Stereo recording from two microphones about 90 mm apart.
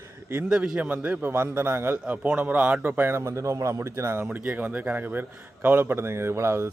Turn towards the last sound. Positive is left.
turn(degrees=-30)  # may be behind; listen again after turning